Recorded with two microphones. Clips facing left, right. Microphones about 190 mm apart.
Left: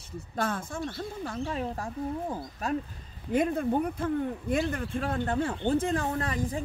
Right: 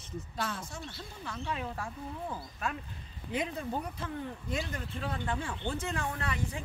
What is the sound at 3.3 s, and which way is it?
Speech, 50° left (ahead or behind).